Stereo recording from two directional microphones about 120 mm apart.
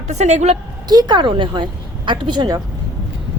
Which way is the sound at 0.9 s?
35° right (ahead or behind).